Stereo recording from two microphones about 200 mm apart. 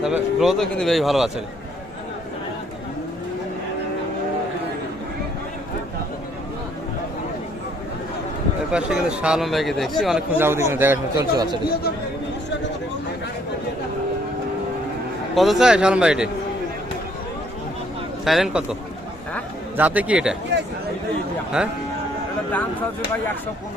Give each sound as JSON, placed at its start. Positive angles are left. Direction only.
{"t": 0.0, "sound": "speech", "side_deg": 0}
{"t": 8.7, "sound": "a man's voice", "side_deg": -5}
{"t": 15.4, "sound": "speech", "side_deg": 0}
{"t": 18.3, "sound": "a man's voice", "side_deg": 0}
{"t": 20.5, "sound": "speech", "side_deg": -60}
{"t": 21.6, "sound": "speech", "side_deg": -5}